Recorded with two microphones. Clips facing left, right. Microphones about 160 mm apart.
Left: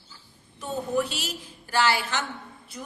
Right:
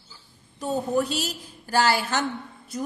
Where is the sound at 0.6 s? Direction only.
40° right (ahead or behind).